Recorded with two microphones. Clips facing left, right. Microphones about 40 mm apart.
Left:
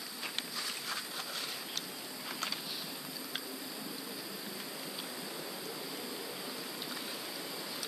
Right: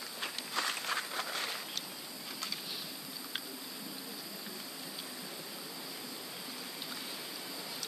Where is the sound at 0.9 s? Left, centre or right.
Right.